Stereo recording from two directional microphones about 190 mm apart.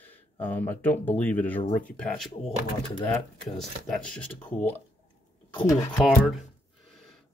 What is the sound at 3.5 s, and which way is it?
Speech, centre (ahead or behind).